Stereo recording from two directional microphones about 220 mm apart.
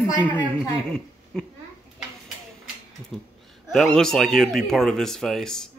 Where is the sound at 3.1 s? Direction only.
Centre (ahead or behind).